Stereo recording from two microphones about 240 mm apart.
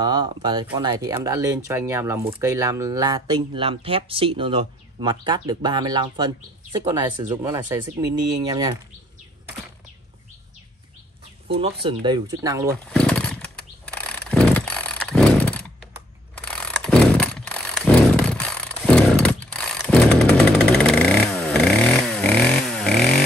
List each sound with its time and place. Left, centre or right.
0.0 s speech: centre
11.5 s speech: right
12.9 s chainsaw: centre
16.3 s a sound: centre